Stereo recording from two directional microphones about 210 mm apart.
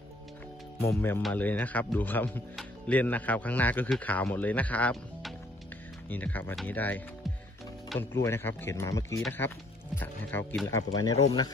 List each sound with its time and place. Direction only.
0.8 s speech: 10° left (ahead or behind)
10.7 s speech: 15° left (ahead or behind)